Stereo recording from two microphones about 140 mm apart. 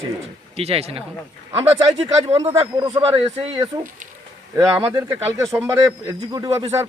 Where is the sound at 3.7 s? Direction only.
25° right (ahead or behind).